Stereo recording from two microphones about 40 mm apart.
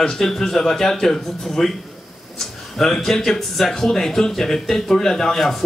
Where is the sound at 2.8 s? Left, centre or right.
Centre.